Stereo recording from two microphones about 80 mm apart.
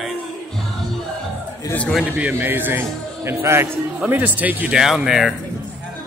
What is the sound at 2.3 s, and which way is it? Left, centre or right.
A man's voice, right.